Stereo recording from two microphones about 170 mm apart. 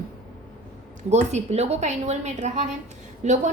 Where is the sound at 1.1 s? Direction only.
40° right (ahead or behind).